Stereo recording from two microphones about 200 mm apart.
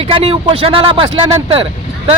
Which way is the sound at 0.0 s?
25° right (ahead or behind).